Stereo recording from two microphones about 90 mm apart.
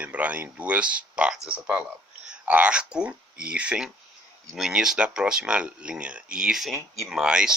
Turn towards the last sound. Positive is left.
turn(degrees=-10)  # may be behind; listen again after turning